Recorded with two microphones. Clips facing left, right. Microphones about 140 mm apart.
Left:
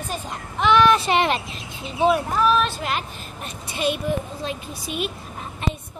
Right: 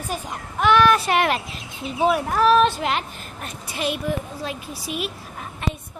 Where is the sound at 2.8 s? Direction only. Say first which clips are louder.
Right 2 dB; 90° right.